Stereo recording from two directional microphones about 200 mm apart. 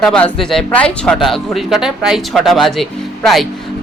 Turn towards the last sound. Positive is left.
turn(degrees=0)  # may be behind; listen again after turning